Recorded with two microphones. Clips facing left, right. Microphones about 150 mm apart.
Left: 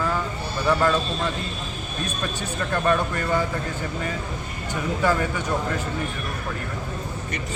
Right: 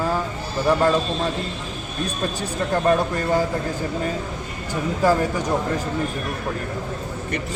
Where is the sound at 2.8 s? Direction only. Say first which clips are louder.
Right 3 dB; 35° right (ahead or behind).